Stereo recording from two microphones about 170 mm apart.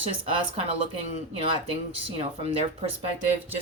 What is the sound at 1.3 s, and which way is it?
Speech, 30° right (ahead or behind).